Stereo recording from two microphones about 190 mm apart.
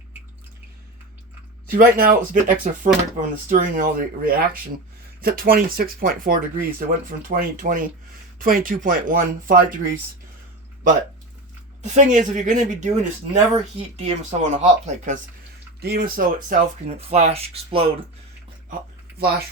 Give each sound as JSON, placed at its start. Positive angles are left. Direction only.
{"t": 1.7, "sound": "speech", "side_deg": -45}
{"t": 11.8, "sound": "speech", "side_deg": -40}
{"t": 15.8, "sound": "speech", "side_deg": -55}